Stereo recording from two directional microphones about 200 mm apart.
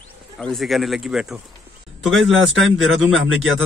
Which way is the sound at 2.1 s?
70° right (ahead or behind).